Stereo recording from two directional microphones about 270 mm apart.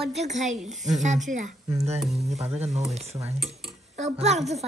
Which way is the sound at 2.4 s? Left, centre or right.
Right.